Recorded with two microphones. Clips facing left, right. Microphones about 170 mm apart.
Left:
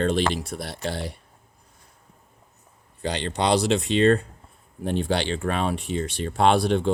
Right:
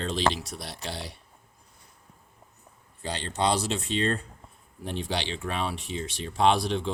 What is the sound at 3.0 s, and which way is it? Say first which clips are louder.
Speech: left 3 dB; 70° left (ahead or behind).